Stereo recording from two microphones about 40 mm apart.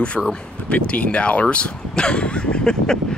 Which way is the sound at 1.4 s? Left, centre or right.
Left.